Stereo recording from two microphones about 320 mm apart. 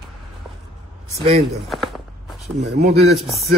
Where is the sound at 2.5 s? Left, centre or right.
Right.